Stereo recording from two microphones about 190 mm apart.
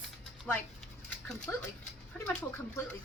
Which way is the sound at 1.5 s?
5° left (ahead or behind).